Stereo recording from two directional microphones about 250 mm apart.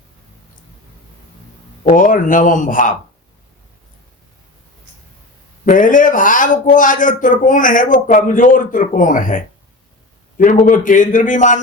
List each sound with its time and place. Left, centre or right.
1.8 s a man's voice: left
5.6 s a man's voice: left